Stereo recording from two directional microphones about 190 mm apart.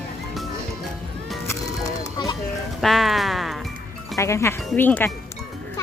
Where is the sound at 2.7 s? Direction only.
Centre (ahead or behind).